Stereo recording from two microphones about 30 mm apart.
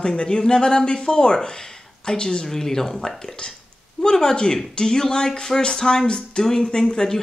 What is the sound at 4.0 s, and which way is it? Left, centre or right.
Speech, left.